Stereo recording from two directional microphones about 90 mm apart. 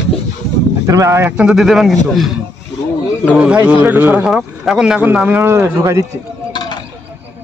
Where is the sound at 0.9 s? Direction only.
40° right (ahead or behind).